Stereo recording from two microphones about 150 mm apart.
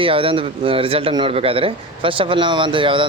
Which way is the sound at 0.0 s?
35° right (ahead or behind).